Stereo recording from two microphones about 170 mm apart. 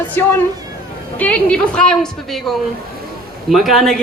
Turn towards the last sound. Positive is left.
turn(degrees=0)  # may be behind; listen again after turning